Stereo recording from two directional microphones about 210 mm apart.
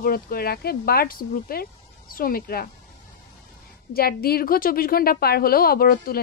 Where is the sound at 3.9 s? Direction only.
45° left (ahead or behind).